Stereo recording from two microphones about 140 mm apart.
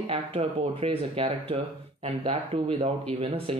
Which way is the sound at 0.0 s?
45° right (ahead or behind).